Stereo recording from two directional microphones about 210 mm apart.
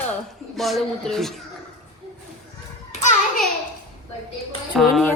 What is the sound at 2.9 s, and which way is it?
Hands, 35° left (ahead or behind).